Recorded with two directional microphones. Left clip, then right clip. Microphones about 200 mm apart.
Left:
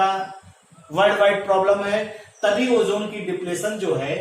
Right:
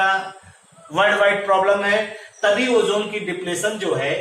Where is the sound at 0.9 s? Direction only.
20° left (ahead or behind).